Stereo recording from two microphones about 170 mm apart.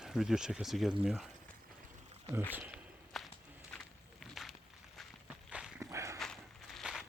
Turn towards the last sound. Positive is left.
turn(degrees=0)  # may be behind; listen again after turning